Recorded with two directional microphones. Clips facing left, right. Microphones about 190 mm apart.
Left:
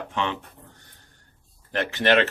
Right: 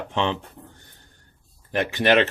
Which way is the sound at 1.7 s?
15° right (ahead or behind).